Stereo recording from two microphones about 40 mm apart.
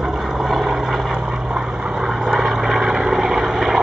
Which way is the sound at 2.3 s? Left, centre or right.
Centre.